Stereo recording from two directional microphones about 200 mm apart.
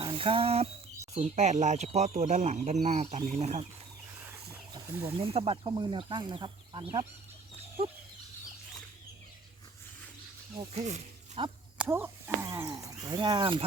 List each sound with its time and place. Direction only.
0.0 s speech: 25° right (ahead or behind)
4.7 s speech: 25° right (ahead or behind)
10.6 s speech: 30° right (ahead or behind)
11.8 s speech: 10° right (ahead or behind); by 13.7 s 25° right (ahead or behind)